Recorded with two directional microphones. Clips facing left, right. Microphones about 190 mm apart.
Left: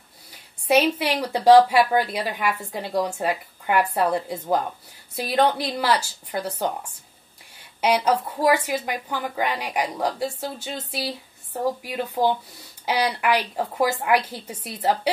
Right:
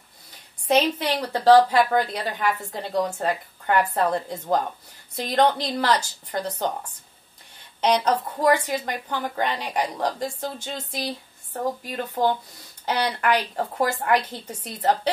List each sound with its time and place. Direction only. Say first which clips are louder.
0.3 s speech: left 1 dB; 10° left (ahead or behind)